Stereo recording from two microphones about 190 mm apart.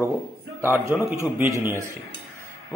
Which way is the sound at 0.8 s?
15° right (ahead or behind).